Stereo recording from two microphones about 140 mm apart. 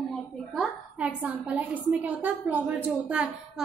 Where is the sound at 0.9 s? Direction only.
10° right (ahead or behind).